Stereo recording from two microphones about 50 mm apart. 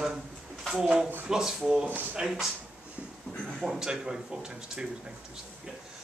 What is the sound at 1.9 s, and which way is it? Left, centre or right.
Speech, right.